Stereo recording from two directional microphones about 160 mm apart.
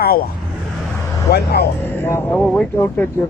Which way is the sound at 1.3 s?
80° left.